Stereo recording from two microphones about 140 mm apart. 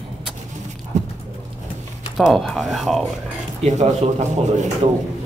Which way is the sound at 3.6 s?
55° right (ahead or behind).